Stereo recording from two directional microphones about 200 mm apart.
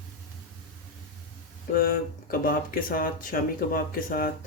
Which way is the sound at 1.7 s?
45° left (ahead or behind).